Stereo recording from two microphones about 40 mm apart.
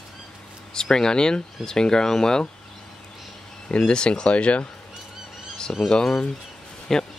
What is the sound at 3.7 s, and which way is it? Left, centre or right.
Speech, left.